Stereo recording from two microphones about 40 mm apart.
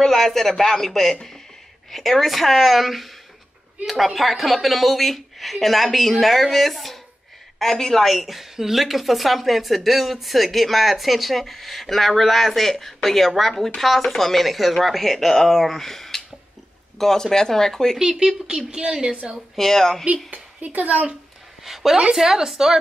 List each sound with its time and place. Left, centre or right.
0.0 s speech: centre
17.9 s a woman's voice: centre
19.5 s speech: centre
20.2 s speech: right
21.6 s speech: centre